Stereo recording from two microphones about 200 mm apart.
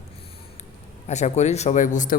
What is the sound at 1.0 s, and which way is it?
A man's voice, 35° left (ahead or behind).